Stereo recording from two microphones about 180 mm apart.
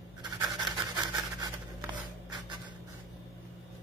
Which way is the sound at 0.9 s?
20° right (ahead or behind).